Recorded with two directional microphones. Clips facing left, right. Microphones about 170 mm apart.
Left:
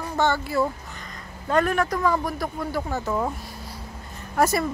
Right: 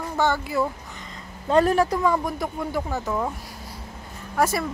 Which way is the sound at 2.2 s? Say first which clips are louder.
Right 1 dB; 20° right (ahead or behind).